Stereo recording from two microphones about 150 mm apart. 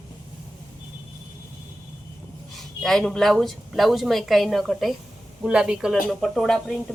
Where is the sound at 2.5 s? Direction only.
Centre (ahead or behind).